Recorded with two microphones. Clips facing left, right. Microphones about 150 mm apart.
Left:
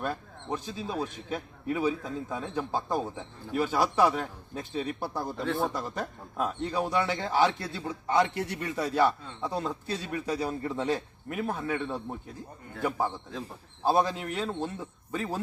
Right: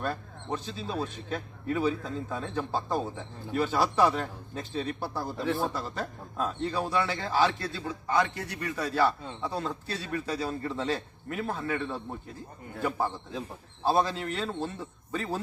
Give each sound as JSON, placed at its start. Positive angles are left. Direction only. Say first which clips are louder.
{"t": 0.0, "sound": "a man's voice", "louder": "even", "side_deg": 10}
{"t": 5.4, "sound": "a man's voice", "louder": "even", "side_deg": 0}
{"t": 5.7, "sound": "a man's voice", "louder": "left 1 dB", "side_deg": 15}
{"t": 13.8, "sound": "a man's voice", "louder": "left 1 dB", "side_deg": 15}